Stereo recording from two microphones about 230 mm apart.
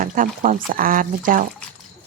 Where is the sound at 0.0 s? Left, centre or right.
Right.